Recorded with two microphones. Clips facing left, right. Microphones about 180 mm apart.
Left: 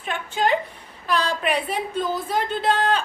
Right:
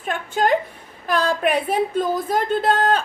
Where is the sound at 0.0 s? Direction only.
45° right (ahead or behind).